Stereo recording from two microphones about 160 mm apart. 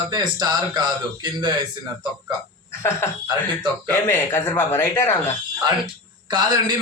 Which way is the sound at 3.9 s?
15° left (ahead or behind).